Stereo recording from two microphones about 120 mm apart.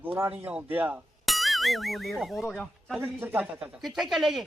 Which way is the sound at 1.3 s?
Centre (ahead or behind).